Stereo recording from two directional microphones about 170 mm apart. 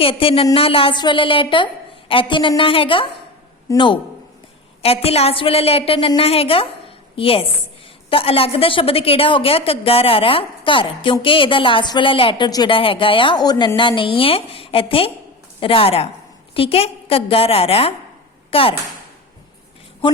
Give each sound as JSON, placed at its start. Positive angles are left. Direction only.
{"t": 0.0, "sound": "a woman's voice", "side_deg": 30}